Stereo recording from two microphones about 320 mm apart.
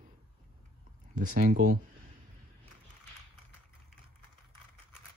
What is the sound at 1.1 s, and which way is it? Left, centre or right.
Speech, right.